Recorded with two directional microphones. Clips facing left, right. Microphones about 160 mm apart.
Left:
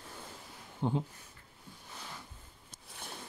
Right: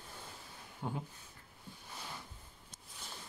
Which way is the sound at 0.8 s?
25° left (ahead or behind).